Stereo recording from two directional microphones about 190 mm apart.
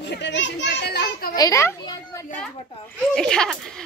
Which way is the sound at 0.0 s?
65° left (ahead or behind).